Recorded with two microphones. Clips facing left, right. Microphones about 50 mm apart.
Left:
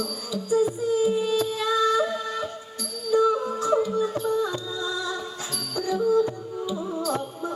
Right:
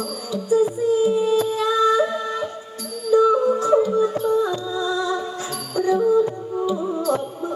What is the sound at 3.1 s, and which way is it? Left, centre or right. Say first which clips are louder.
Music: right 6 dB; centre.